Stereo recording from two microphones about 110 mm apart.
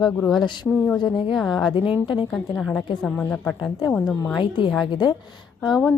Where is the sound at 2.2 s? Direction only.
10° left (ahead or behind).